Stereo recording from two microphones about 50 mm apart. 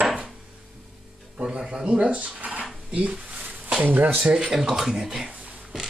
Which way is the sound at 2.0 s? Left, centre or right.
Right.